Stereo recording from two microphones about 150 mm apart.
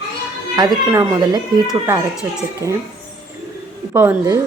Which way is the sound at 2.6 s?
20° right (ahead or behind).